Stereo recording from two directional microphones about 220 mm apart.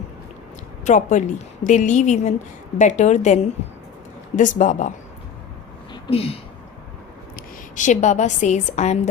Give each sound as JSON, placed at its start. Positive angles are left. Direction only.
{"t": 0.9, "sound": "a woman's voice", "side_deg": 35}
{"t": 5.9, "sound": "a sound", "side_deg": 25}
{"t": 7.8, "sound": "a woman's voice", "side_deg": 35}